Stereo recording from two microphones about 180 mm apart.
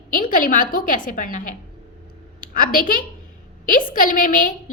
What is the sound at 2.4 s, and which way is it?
A woman's voice, 50° left (ahead or behind).